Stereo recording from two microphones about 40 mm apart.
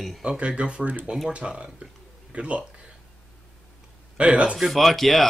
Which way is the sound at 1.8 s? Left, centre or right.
Right.